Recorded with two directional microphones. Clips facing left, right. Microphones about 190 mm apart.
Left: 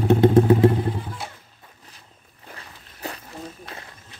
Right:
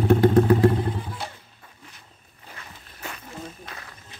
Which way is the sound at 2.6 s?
35° left (ahead or behind).